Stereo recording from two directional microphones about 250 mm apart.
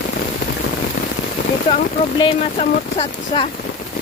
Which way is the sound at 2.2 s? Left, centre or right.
Left.